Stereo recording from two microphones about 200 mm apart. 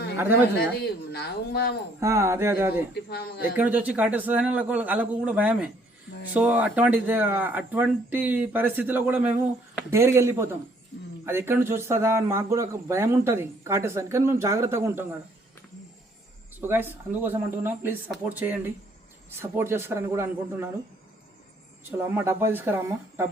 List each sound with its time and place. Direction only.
0.5 s a woman's voice: 55° left (ahead or behind)
2.0 s speech: 15° right (ahead or behind)
2.9 s a woman's voice: 55° left (ahead or behind)
3.6 s speech: 10° right (ahead or behind)
16.6 s speech: 10° right (ahead or behind)
22.0 s speech: 15° right (ahead or behind)